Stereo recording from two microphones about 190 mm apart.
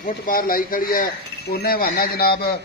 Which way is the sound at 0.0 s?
50° left (ahead or behind).